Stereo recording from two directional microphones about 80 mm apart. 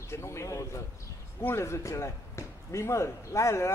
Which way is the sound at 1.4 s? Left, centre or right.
Left.